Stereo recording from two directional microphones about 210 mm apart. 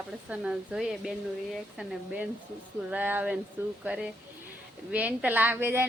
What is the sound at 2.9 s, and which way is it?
Speech, 10° right (ahead or behind).